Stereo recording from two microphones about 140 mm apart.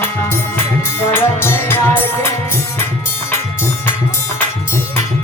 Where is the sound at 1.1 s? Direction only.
15° left (ahead or behind).